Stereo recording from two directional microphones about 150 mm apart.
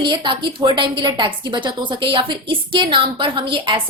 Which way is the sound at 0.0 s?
30° right (ahead or behind).